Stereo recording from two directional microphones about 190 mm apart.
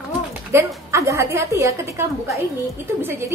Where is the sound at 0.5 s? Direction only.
15° right (ahead or behind).